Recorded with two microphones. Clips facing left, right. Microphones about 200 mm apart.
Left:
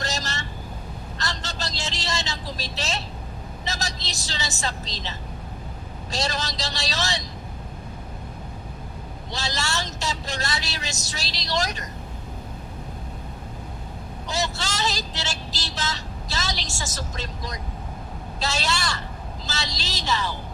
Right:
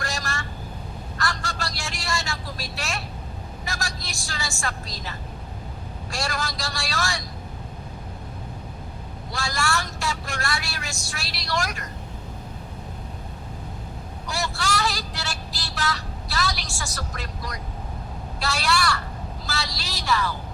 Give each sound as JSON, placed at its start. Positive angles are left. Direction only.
{"t": 0.0, "sound": "vehicle", "side_deg": 20}
{"t": 6.1, "sound": "a man's voice", "side_deg": 20}
{"t": 9.4, "sound": "vehicle", "side_deg": 20}
{"t": 11.1, "sound": "a man's voice", "side_deg": 20}
{"t": 14.3, "sound": "vehicle", "side_deg": 20}
{"t": 18.3, "sound": "a man's voice", "side_deg": 20}